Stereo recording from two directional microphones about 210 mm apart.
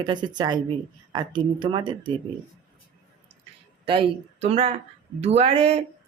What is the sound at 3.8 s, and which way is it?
A woman's voice, 25° right (ahead or behind).